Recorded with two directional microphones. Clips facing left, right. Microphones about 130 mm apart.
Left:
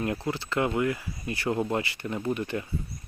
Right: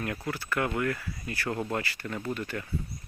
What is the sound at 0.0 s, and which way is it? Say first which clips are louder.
Speech: left 4 dB; 25° left (ahead or behind).